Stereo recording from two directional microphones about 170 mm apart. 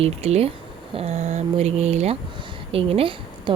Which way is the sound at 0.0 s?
35° right (ahead or behind).